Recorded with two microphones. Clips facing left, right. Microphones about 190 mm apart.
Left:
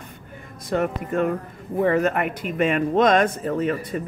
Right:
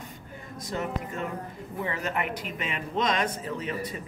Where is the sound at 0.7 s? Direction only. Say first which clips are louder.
Left 9 dB; 60° left (ahead or behind).